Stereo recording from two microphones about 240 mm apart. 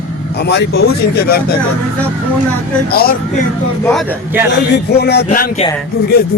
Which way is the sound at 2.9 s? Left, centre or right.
Left.